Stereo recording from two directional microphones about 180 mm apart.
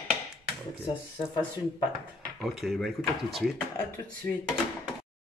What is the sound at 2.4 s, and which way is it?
Speech, centre (ahead or behind).